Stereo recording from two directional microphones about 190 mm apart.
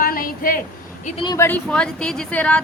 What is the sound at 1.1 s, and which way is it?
Speech, 30° left (ahead or behind).